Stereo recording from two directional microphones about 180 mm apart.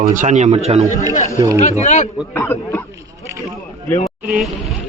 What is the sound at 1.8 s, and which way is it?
Speech, 40° left (ahead or behind).